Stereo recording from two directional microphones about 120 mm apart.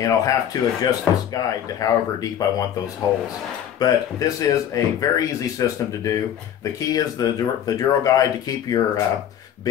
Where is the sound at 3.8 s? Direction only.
30° left (ahead or behind).